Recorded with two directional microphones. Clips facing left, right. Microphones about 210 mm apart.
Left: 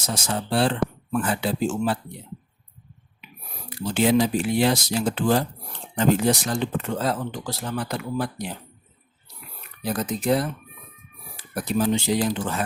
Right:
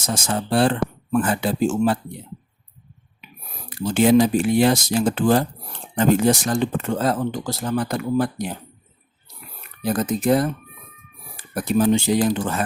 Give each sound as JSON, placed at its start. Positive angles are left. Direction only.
{"t": 0.1, "sound": "speech", "side_deg": -50}
{"t": 3.7, "sound": "speech", "side_deg": -50}
{"t": 9.8, "sound": "speech", "side_deg": -50}